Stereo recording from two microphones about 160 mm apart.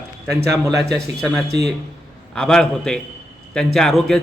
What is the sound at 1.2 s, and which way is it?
A man's voice, centre (ahead or behind).